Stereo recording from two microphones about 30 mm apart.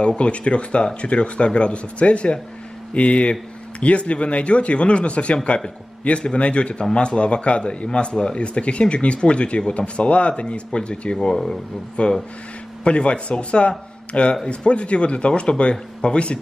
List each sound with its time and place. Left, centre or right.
0.2 s a man's voice: left